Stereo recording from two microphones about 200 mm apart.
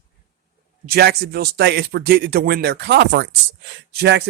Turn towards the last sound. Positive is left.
turn(degrees=-55)  # may be behind; listen again after turning